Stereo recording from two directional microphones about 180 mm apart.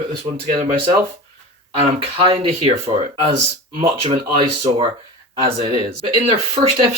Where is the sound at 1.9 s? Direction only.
30° right (ahead or behind).